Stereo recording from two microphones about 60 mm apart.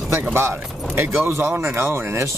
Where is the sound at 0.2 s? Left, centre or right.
Right.